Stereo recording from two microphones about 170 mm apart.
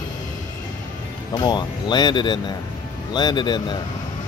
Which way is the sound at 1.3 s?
25° left (ahead or behind).